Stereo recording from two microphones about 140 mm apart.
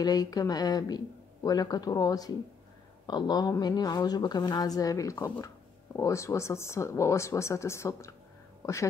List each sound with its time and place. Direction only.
0.0 s a woman's voice: 30° left (ahead or behind)